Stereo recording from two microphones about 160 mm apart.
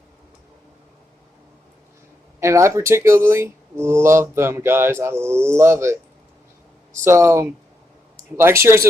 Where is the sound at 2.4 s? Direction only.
20° right (ahead or behind).